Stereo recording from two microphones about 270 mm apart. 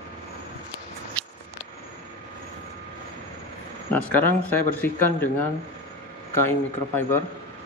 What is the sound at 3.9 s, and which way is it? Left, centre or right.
Speech, centre.